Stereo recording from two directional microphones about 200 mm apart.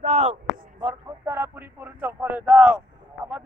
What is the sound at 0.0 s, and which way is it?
Speech, 35° right (ahead or behind).